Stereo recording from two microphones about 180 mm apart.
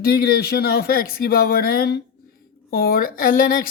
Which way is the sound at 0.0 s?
55° left (ahead or behind).